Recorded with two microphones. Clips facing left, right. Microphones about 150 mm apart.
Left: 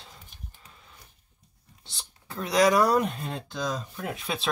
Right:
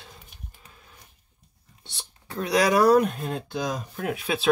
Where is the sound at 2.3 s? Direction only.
Centre (ahead or behind).